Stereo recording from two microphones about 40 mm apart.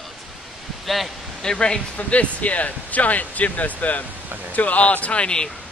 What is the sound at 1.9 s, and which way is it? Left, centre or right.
Speech, left.